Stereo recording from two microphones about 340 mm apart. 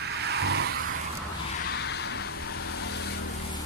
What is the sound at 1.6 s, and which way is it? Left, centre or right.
Vehicle, left.